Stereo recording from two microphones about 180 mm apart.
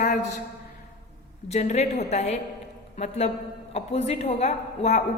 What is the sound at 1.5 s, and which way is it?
A man's voice, 40° left (ahead or behind).